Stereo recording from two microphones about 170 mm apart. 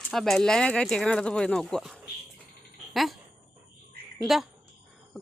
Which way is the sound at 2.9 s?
Centre (ahead or behind).